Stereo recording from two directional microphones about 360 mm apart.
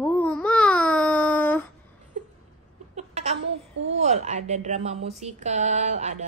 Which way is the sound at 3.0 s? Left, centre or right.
Centre.